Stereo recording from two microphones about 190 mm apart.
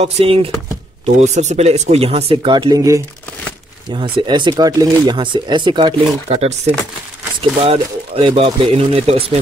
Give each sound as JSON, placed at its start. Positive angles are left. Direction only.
{"t": 0.0, "sound": "speech", "side_deg": -30}